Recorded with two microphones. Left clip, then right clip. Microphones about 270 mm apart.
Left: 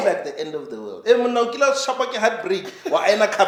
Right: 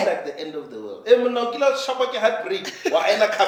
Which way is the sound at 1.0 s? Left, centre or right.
Left.